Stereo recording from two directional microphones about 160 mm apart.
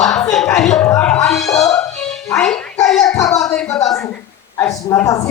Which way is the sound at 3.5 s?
Centre (ahead or behind).